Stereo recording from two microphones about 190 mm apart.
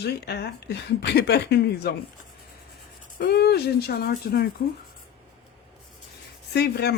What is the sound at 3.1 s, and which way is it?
Speech, 55° left (ahead or behind).